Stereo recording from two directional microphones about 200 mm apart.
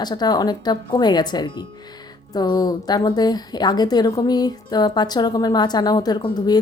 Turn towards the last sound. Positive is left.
turn(degrees=20)  # may be behind; listen again after turning